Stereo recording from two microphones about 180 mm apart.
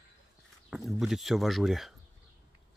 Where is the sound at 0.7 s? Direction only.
Centre (ahead or behind).